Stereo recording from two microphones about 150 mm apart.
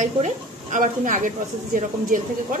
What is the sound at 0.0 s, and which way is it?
A woman's voice, 55° right (ahead or behind).